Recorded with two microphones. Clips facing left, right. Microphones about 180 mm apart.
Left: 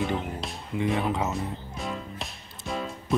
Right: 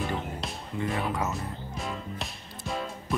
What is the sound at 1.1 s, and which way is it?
Speech, 25° left (ahead or behind).